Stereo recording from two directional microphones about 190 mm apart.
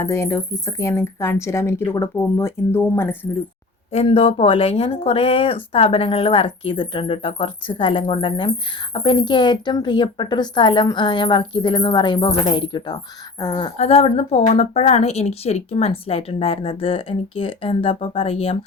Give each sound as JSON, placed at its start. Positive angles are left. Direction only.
{"t": 0.0, "sound": "speech", "side_deg": 15}
{"t": 3.9, "sound": "speech", "side_deg": 30}
{"t": 13.7, "sound": "a woman's voice", "side_deg": 30}